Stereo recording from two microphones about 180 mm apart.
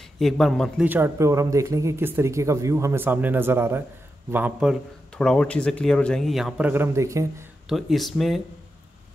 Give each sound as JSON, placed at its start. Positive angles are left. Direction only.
{"t": 0.2, "sound": "a man's voice", "side_deg": 0}
{"t": 0.8, "sound": "a man's voice", "side_deg": -10}
{"t": 6.7, "sound": "speech", "side_deg": -15}
{"t": 7.6, "sound": "a man's voice", "side_deg": 0}